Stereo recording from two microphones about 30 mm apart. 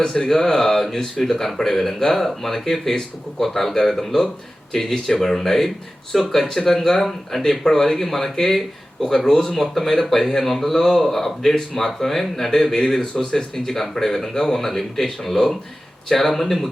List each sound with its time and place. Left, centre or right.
0.0 s speech: left; by 16.6 s centre